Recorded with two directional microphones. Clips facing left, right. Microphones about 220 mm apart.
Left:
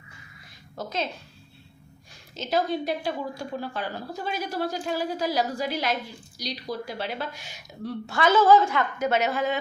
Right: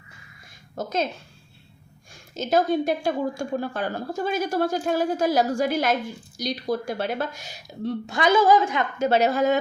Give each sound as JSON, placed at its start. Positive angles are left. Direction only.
{"t": 0.8, "sound": "a woman's voice", "side_deg": -45}
{"t": 2.3, "sound": "a woman's voice", "side_deg": -45}
{"t": 7.9, "sound": "a woman's voice", "side_deg": -15}
{"t": 9.0, "sound": "a woman's voice", "side_deg": -35}